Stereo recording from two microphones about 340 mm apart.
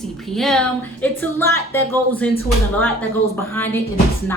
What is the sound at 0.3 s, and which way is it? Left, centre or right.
Speech, centre.